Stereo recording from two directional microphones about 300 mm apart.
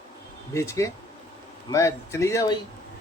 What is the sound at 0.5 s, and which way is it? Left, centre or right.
Speech, centre.